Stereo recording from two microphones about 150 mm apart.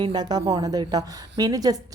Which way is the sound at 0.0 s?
30° right (ahead or behind).